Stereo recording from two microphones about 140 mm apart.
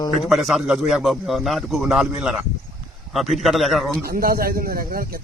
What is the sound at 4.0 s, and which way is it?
A man's voice, 90° right.